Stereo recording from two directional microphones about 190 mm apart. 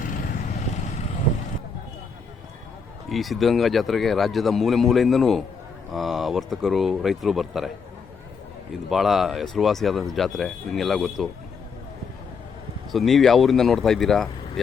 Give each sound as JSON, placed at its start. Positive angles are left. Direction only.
{"t": 0.0, "sound": "vehicle", "side_deg": 45}
{"t": 3.1, "sound": "speech", "side_deg": 0}
{"t": 8.9, "sound": "speech", "side_deg": 0}
{"t": 12.9, "sound": "speech", "side_deg": 0}